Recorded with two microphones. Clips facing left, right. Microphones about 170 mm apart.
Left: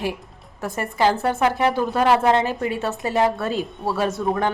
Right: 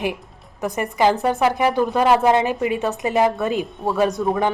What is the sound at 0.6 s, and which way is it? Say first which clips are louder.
A woman's voice: right 2 dB; 15° right (ahead or behind).